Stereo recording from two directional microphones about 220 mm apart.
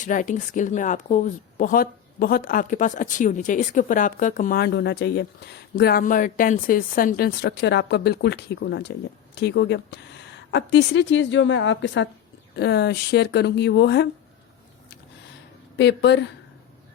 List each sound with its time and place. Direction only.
0.0 s a woman's voice: 35° left (ahead or behind)
15.8 s a woman's voice: 50° left (ahead or behind)